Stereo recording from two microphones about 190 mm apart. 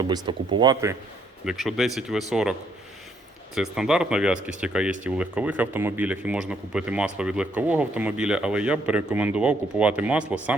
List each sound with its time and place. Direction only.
0.0 s speech: 25° right (ahead or behind)
1.5 s speech: centre (ahead or behind)